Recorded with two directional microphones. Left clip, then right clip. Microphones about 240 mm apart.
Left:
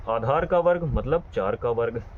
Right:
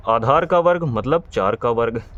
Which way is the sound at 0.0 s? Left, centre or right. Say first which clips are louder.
Right 7 dB; right.